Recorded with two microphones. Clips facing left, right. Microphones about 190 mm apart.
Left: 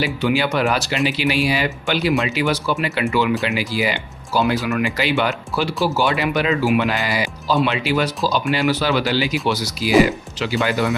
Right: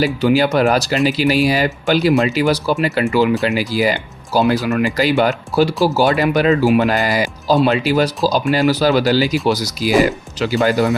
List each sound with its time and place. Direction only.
0.0 s speech: 40° right (ahead or behind)